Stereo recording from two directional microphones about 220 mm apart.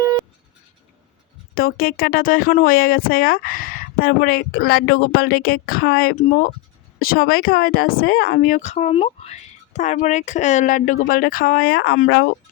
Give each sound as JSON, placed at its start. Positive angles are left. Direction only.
{"t": 1.5, "sound": "speech", "side_deg": 40}